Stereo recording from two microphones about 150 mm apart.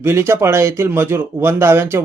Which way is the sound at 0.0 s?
15° right (ahead or behind).